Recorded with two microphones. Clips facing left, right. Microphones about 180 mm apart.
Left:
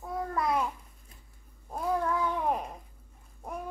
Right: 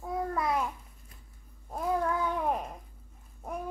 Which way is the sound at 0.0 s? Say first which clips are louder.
Even; centre (ahead or behind).